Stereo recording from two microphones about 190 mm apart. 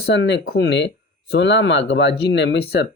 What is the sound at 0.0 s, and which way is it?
Speech, 65° left (ahead or behind).